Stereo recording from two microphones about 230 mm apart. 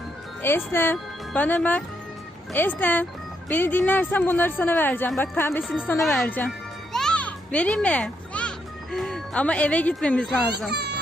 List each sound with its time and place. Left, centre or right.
0.4 s speech: centre
6.9 s music: centre
10.7 s speech: right